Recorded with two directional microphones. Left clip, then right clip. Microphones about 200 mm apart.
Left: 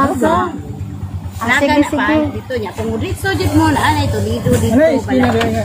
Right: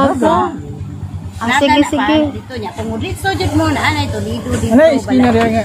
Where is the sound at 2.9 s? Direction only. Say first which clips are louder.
Right 2 dB; 20° right (ahead or behind).